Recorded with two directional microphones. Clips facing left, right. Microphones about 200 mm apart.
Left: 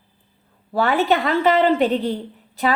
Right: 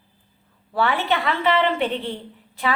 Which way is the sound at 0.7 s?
40° left (ahead or behind).